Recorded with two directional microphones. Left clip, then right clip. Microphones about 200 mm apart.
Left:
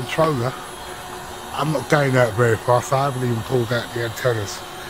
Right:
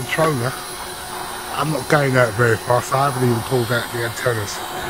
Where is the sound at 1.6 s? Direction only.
45° left (ahead or behind).